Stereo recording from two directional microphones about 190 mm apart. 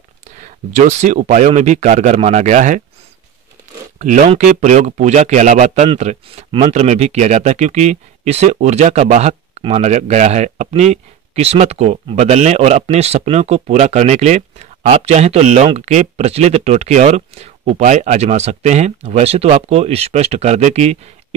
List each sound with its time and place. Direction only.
0.4 s speech: 40° right (ahead or behind)
4.0 s speech: 40° right (ahead or behind)